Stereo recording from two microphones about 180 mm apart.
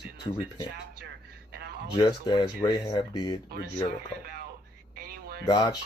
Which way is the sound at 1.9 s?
25° left (ahead or behind).